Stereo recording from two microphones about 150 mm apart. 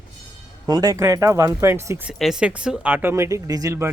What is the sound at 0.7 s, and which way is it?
Speech, 25° right (ahead or behind).